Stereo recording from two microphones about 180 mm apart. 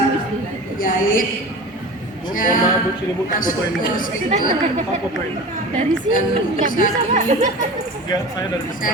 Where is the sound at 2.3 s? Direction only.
50° left (ahead or behind).